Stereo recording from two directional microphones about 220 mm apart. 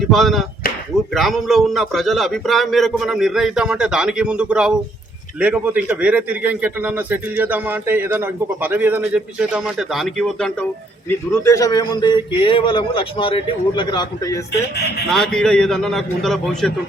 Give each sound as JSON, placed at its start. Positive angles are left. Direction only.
{"t": 0.0, "sound": "a man's voice", "side_deg": 0}
{"t": 11.4, "sound": "a man's voice", "side_deg": 15}
{"t": 15.1, "sound": "a man's voice", "side_deg": 5}